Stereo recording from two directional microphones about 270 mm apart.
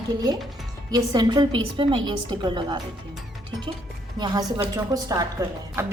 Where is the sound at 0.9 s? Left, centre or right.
Centre.